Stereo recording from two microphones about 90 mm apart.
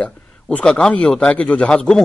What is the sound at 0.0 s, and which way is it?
A man's voice, 15° left (ahead or behind).